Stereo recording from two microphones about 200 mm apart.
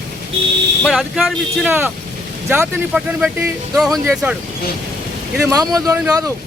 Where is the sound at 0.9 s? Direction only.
Centre (ahead or behind).